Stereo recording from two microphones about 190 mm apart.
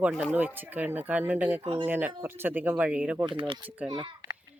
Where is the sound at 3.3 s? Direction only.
25° right (ahead or behind).